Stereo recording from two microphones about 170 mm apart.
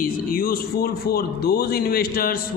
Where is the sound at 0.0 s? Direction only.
60° left (ahead or behind).